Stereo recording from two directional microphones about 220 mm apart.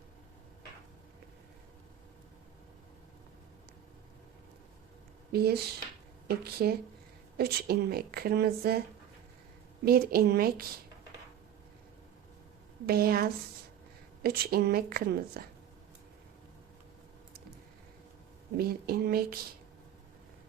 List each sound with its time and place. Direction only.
5.3 s a woman's voice: 45° right (ahead or behind)
9.8 s a woman's voice: 45° right (ahead or behind)
12.8 s a woman's voice: 45° right (ahead or behind)
18.5 s a woman's voice: 45° right (ahead or behind)